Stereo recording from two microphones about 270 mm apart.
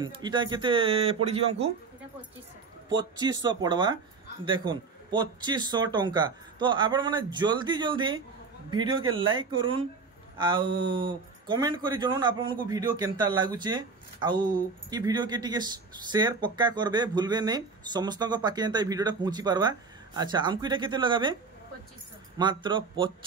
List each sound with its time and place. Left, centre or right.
0.0 s speech: centre
3.0 s speech: centre
22.4 s speech: centre